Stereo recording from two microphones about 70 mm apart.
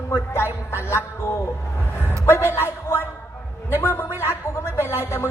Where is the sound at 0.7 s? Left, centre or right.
Left.